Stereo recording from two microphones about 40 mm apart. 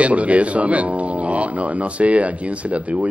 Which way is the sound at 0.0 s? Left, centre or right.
Right.